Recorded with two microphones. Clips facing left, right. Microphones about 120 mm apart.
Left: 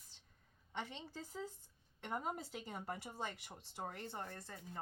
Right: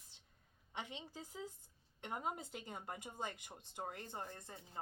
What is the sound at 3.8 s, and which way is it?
Speech, 15° right (ahead or behind).